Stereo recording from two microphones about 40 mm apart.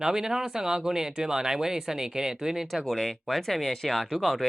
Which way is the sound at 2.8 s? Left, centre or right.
Centre.